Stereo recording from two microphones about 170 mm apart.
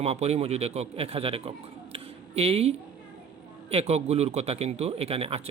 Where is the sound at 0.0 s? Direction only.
40° right (ahead or behind).